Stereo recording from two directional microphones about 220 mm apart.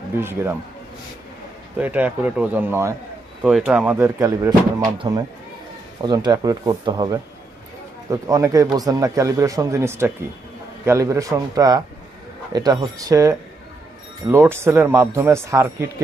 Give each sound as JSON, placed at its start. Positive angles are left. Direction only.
{"t": 0.2, "sound": "speech", "side_deg": -10}
{"t": 1.8, "sound": "speech", "side_deg": -5}